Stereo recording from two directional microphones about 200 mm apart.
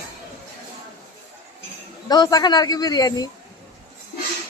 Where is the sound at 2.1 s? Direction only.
20° left (ahead or behind).